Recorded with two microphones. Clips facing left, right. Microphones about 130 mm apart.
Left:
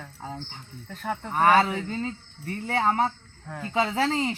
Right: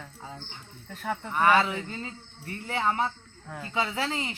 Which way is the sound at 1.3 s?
40° left (ahead or behind).